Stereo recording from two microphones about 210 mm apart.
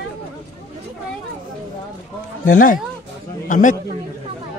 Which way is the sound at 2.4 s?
40° left (ahead or behind).